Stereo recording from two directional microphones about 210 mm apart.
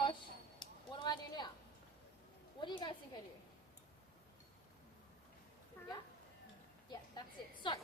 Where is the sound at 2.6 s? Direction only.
25° left (ahead or behind).